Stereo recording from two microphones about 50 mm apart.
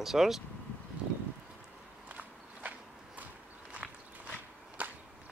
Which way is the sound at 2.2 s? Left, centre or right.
Right.